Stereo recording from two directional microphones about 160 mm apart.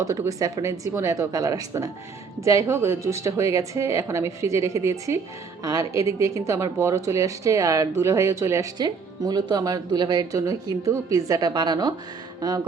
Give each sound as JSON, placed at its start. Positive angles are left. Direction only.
{"t": 0.0, "sound": "speech", "side_deg": -20}